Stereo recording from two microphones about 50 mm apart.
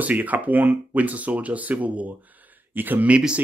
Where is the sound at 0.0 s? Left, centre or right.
Right.